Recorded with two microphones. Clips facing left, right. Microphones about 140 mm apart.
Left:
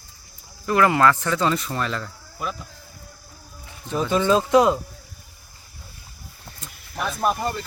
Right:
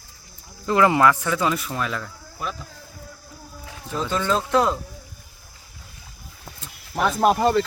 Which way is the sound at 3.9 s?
15° left (ahead or behind).